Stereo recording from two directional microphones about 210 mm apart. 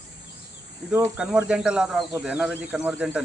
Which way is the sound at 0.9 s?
10° right (ahead or behind).